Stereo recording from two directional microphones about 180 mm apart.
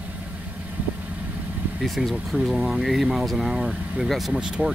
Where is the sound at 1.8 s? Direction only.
Centre (ahead or behind).